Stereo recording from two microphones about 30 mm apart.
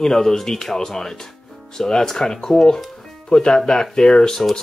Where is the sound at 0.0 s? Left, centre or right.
Centre.